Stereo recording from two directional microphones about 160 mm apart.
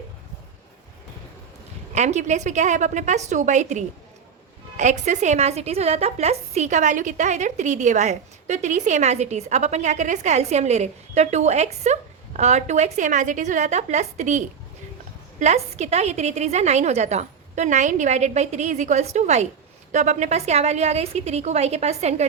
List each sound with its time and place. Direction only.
2.0 s a woman's voice: 45° right (ahead or behind)